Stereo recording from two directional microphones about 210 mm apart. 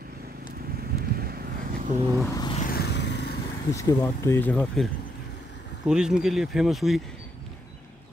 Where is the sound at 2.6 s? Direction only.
50° left (ahead or behind).